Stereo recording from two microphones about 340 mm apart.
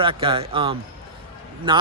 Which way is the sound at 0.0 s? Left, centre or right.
Centre.